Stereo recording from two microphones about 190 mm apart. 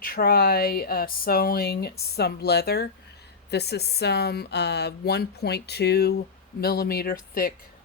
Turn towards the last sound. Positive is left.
turn(degrees=50)  # may be behind; listen again after turning